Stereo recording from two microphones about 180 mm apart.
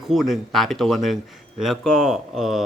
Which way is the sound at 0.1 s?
Centre (ahead or behind).